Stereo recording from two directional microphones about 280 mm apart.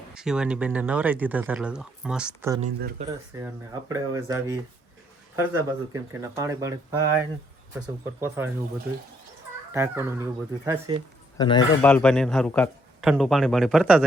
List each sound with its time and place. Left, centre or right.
0.1 s speech: centre
2.6 s speech: right
3.1 s speech: centre
5.5 s speech: centre
9.7 s speech: centre
11.3 s speech: centre
11.9 s speech: centre